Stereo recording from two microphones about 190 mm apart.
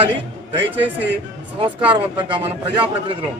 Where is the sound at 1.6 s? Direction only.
25° right (ahead or behind).